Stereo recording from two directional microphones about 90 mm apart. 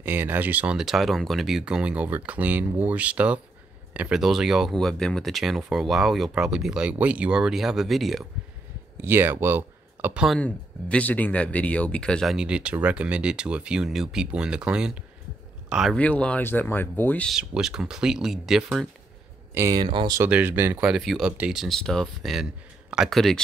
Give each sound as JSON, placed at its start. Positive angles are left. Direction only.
{"t": 0.0, "sound": "speech", "side_deg": -20}
{"t": 4.7, "sound": "speech", "side_deg": 5}
{"t": 9.0, "sound": "speech", "side_deg": -25}
{"t": 10.1, "sound": "speech", "side_deg": -5}
{"t": 10.4, "sound": "speech", "side_deg": 15}
{"t": 12.3, "sound": "speech", "side_deg": -10}
{"t": 16.0, "sound": "speech", "side_deg": 15}
{"t": 17.3, "sound": "speech", "side_deg": -5}
{"t": 19.5, "sound": "speech", "side_deg": -30}
{"t": 19.8, "sound": "speech", "side_deg": -65}
{"t": 20.2, "sound": "speech", "side_deg": -15}
{"t": 21.5, "sound": "speech", "side_deg": 0}
{"t": 22.4, "sound": "a sound", "side_deg": -10}
{"t": 23.0, "sound": "speech", "side_deg": 5}